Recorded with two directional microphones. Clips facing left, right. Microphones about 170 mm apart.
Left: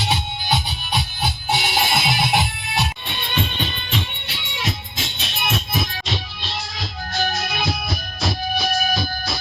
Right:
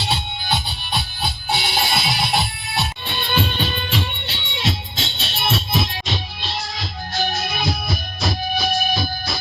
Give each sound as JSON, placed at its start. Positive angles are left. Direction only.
{"t": 0.0, "sound": "music", "side_deg": 15}
{"t": 3.2, "sound": "music", "side_deg": -35}